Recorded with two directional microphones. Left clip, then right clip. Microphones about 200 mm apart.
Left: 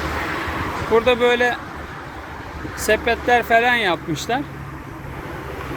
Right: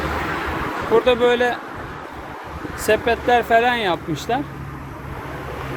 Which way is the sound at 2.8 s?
10° right (ahead or behind).